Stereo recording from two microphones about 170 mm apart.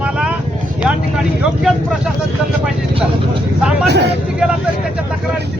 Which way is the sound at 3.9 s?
80° right.